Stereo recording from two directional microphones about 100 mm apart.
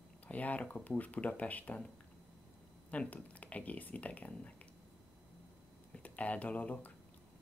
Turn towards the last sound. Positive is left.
turn(degrees=15)  # may be behind; listen again after turning